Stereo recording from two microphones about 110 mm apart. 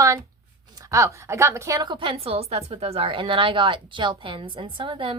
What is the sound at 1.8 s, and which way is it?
A woman's voice, 45° right (ahead or behind).